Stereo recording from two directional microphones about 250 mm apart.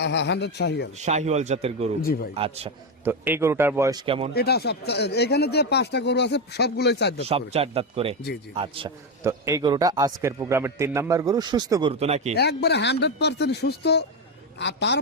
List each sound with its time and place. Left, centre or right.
0.0 s speech: left
0.9 s a man's voice: right
3.0 s a man's voice: centre
4.4 s speech: left
7.3 s a man's voice: right
12.4 s speech: left